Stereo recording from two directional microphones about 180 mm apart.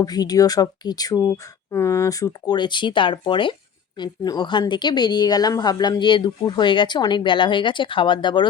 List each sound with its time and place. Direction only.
0.0 s speech: 20° left (ahead or behind)